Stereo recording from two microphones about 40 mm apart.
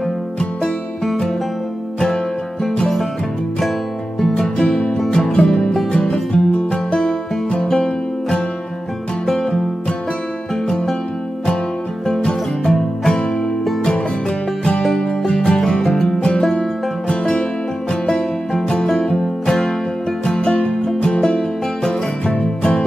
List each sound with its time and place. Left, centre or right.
4.6 s music: centre
4.9 s music: centre
5.9 s music: left
6.9 s music: centre
9.2 s music: centre
12.1 s music: centre
14.8 s music: centre
18.9 s music: centre